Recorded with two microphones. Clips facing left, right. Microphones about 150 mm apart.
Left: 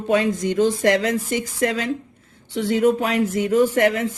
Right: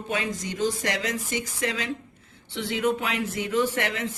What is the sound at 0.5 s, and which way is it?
Speech, 50° left (ahead or behind).